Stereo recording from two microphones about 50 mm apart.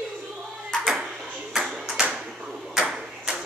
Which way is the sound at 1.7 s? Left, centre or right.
Centre.